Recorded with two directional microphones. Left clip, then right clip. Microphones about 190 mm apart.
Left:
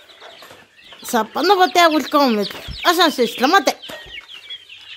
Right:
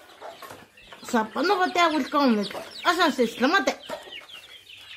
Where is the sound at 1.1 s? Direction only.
50° left (ahead or behind).